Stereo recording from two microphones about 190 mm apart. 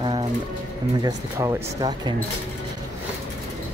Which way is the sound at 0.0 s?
20° right (ahead or behind).